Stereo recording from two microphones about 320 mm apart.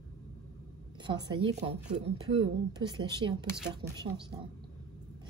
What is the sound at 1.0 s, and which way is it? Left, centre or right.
A woman's voice, centre.